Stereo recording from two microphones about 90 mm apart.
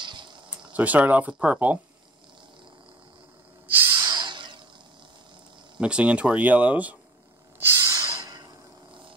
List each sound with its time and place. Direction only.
0.0 s a sound: 60° right (ahead or behind)
0.6 s speech: 15° right (ahead or behind)
3.6 s owl: 25° right (ahead or behind)
4.0 s snort: 55° right (ahead or behind)
5.8 s speech: 10° right (ahead or behind)
7.6 s snort: 30° right (ahead or behind)
8.2 s a sound: 45° right (ahead or behind)